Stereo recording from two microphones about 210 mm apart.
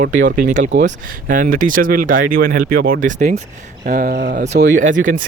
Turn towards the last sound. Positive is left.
turn(degrees=-40)  # may be behind; listen again after turning